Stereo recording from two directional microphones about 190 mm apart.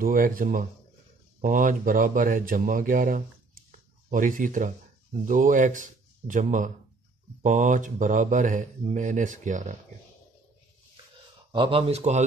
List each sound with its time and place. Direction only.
0.0 s speech: 50° right (ahead or behind)
11.5 s speech: 30° right (ahead or behind)